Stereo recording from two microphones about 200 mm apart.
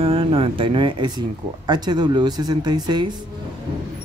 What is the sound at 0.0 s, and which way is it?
Speech, 30° right (ahead or behind).